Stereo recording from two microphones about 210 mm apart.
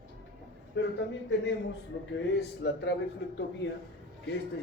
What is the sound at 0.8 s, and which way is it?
Speech, 60° left (ahead or behind).